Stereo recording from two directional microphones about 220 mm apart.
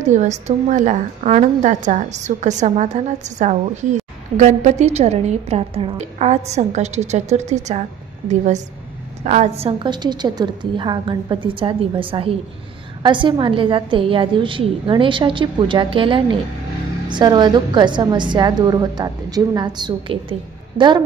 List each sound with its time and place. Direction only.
0.0 s a woman's voice: 35° right (ahead or behind)